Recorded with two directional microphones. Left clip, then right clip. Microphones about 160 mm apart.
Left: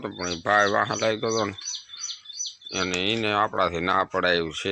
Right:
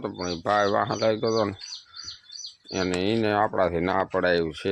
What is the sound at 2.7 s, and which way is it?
Speech, 35° right (ahead or behind).